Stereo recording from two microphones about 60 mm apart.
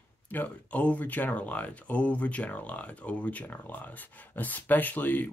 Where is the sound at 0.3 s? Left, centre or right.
Left.